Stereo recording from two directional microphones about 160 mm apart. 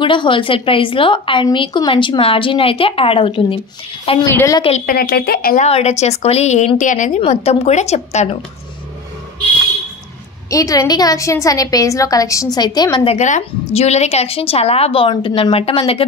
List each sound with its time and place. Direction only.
0.0 s a woman's voice: 30° left (ahead or behind)
4.2 s a woman's voice: 15° left (ahead or behind)
4.6 s a woman's voice: 35° left (ahead or behind)
4.8 s a woman's voice: 70° left (ahead or behind)
5.6 s a woman's voice: 40° left (ahead or behind)
10.5 s a woman's voice: 20° left (ahead or behind)
13.0 s a woman's voice: 45° left (ahead or behind)